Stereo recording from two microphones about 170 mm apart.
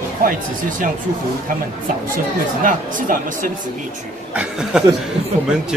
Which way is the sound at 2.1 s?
50° right (ahead or behind).